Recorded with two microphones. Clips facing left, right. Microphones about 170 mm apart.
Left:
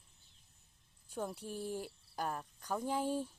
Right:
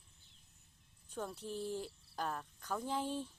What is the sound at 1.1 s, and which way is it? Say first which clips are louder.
Speech: left 1 dB; 10° left (ahead or behind).